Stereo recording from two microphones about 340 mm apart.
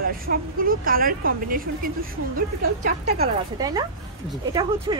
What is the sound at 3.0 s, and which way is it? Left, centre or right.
Speech, centre.